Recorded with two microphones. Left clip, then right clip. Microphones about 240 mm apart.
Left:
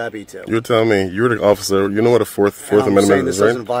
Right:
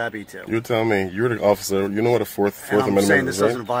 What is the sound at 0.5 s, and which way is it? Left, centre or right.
Speech, left.